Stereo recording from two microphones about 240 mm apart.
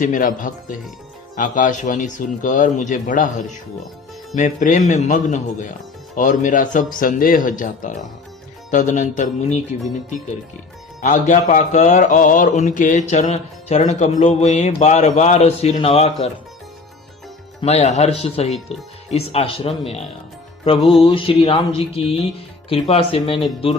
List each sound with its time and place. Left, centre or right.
0.0 s speech: left
11.0 s speech: left
17.6 s speech: left
21.0 s speech: left